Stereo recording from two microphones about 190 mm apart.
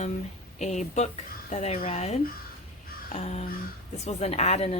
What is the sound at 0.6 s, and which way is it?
Speech, 35° left (ahead or behind).